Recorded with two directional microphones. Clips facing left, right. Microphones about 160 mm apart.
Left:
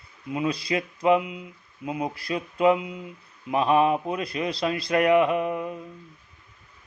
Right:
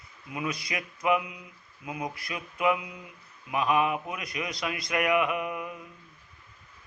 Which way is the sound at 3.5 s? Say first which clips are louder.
Left 5 dB; 30° left (ahead or behind).